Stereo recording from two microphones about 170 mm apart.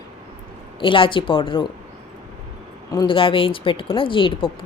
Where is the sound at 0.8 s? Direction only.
30° left (ahead or behind).